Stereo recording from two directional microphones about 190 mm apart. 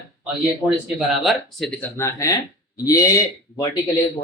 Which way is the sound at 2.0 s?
15° left (ahead or behind).